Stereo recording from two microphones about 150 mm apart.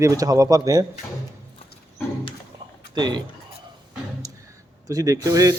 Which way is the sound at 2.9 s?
30° right (ahead or behind).